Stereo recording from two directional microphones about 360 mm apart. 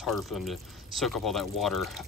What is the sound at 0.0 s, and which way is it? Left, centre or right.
Speech, centre.